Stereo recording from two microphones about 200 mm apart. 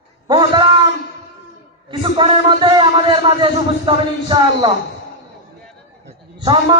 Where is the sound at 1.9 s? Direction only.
25° right (ahead or behind).